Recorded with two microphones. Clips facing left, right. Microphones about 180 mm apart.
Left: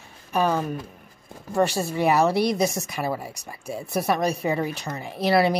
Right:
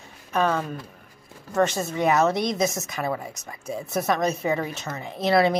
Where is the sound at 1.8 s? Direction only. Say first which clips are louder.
Left 1 dB; 10° left (ahead or behind).